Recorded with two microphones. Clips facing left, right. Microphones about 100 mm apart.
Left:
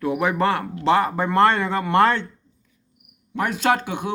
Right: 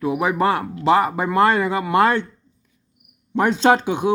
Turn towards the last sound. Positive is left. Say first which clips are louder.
# right 5 dB
turn(degrees=-20)  # may be behind; listen again after turning